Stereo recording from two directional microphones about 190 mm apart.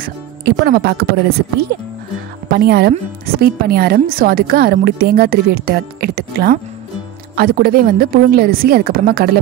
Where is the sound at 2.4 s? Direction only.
55° right (ahead or behind).